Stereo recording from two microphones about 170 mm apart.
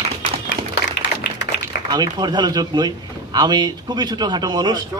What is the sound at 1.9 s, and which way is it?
Speech, 25° right (ahead or behind).